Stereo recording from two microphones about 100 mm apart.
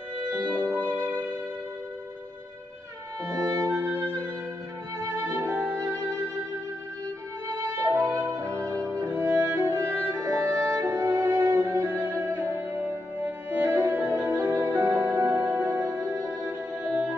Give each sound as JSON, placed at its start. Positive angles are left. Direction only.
{"t": 3.3, "sound": "music", "side_deg": -30}
{"t": 7.6, "sound": "music", "side_deg": -25}